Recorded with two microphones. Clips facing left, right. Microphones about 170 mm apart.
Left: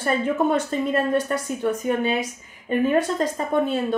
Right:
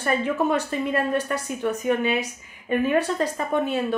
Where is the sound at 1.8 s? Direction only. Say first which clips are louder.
Even; 35° left (ahead or behind).